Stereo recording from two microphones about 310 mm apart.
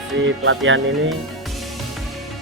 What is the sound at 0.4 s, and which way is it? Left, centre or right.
Speech, right.